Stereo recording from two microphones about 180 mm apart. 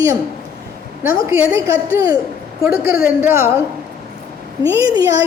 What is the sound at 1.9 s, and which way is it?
A woman's voice, 20° right (ahead or behind).